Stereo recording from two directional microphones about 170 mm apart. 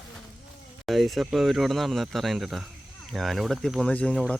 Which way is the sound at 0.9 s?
Centre (ahead or behind).